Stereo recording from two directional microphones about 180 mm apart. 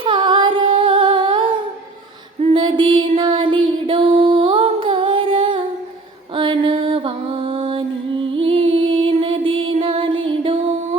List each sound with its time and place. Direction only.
0.0 s humming: 25° right (ahead or behind)
2.4 s music: 30° right (ahead or behind)